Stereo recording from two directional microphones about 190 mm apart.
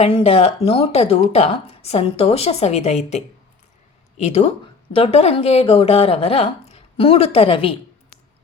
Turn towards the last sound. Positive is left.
turn(degrees=30)  # may be behind; listen again after turning